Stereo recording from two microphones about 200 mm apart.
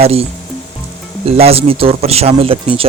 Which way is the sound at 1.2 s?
30° right (ahead or behind).